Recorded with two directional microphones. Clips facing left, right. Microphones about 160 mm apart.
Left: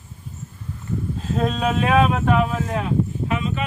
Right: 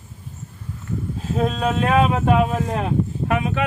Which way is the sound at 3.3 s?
60° right (ahead or behind).